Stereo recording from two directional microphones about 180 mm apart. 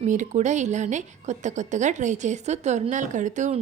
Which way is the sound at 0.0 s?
45° right (ahead or behind).